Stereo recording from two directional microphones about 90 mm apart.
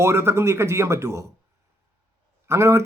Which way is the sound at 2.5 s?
30° right (ahead or behind).